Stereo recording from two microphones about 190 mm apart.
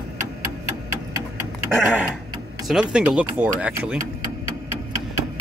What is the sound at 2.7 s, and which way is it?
Speech, 5° right (ahead or behind).